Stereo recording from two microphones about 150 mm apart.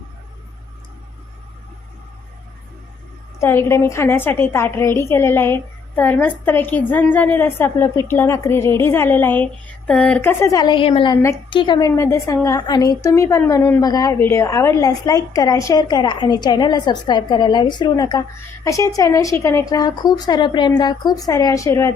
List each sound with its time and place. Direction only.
3.4 s a woman's voice: 15° left (ahead or behind)
11.9 s a woman's voice: 20° left (ahead or behind)